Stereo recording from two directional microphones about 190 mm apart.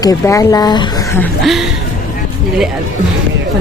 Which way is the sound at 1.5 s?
Centre (ahead or behind).